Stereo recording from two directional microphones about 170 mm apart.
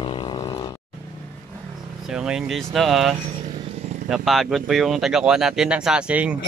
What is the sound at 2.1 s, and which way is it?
Speech, 5° right (ahead or behind).